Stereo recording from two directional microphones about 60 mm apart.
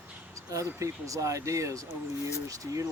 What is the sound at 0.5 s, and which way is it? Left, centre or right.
Speech, right.